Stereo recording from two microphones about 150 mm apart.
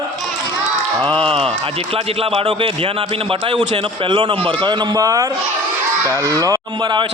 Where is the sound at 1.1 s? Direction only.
5° left (ahead or behind).